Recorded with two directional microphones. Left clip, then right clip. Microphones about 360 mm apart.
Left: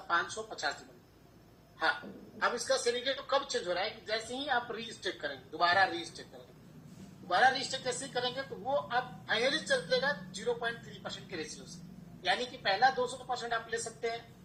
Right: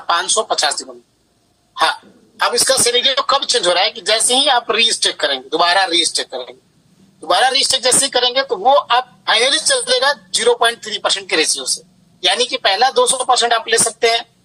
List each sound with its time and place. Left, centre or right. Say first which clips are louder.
0.1 s a woman's voice: right 17 dB; right
1.7 s hiccup: right 16 dB; right
2.4 s a woman's voice: right 16 dB; right